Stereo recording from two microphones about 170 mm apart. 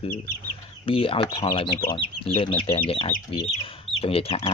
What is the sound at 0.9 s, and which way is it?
Speech, 30° left (ahead or behind).